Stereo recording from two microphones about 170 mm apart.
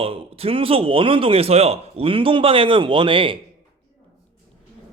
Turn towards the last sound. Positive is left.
turn(degrees=-30)  # may be behind; listen again after turning